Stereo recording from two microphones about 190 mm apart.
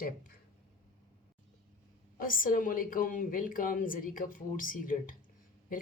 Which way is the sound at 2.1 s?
45° left (ahead or behind).